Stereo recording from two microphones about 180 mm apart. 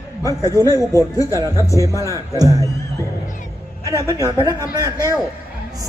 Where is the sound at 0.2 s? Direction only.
15° left (ahead or behind).